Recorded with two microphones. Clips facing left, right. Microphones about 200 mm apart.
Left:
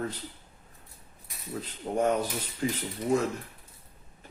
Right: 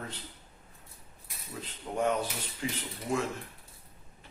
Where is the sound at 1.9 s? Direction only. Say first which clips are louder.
Left 3 dB; 40° left (ahead or behind).